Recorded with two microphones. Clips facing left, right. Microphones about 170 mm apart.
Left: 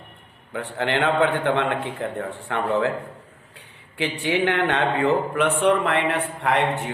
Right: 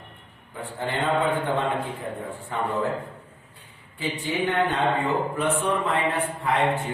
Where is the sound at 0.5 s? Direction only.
80° left.